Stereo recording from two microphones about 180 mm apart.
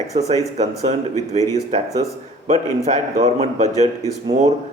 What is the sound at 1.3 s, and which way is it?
A man's voice, 40° right (ahead or behind).